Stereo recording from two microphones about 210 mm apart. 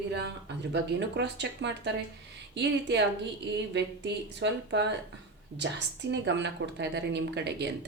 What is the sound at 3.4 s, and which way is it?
Speech, 55° right (ahead or behind).